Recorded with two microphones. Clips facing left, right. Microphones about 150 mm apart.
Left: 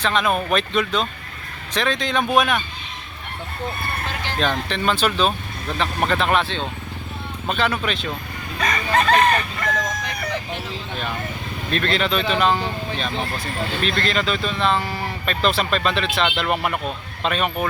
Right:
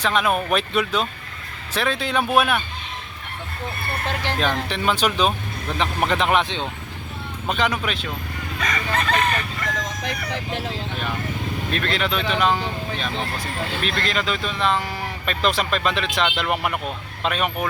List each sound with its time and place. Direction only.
0.0 s speech: 10° right (ahead or behind)
4.4 s speech: 10° right (ahead or behind)
8.6 s chicken: 35° left (ahead or behind)
11.7 s speech: 10° right (ahead or behind)